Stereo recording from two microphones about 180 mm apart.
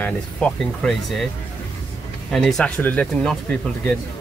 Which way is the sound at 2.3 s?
Centre (ahead or behind).